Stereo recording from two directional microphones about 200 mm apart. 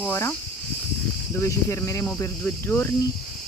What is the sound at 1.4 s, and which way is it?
Speech, 15° left (ahead or behind).